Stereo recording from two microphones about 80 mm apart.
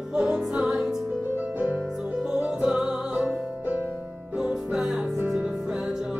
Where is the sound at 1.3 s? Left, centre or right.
Right.